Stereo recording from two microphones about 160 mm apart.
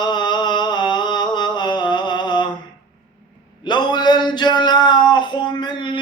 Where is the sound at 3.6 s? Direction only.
25° left (ahead or behind).